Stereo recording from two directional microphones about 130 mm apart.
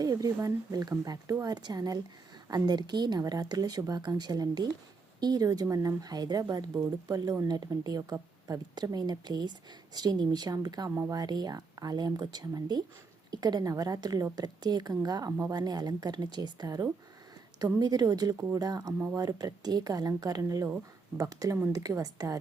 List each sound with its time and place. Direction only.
0.0 s speech: 30° right (ahead or behind)